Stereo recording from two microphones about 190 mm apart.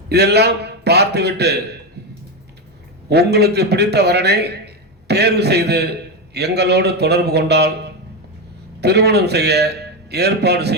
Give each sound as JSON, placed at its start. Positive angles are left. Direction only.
{"t": 0.1, "sound": "a man's voice", "side_deg": -60}
{"t": 3.1, "sound": "a man's voice", "side_deg": -60}